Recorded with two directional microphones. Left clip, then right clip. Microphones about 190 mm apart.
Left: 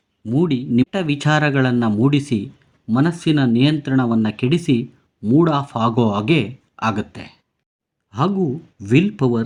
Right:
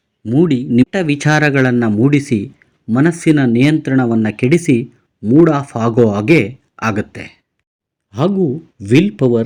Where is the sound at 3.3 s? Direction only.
45° left (ahead or behind).